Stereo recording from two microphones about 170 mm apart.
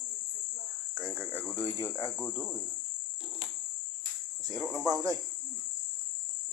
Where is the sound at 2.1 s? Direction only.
5° left (ahead or behind).